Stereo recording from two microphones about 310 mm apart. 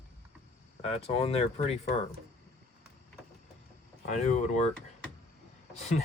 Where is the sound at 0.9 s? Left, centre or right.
Centre.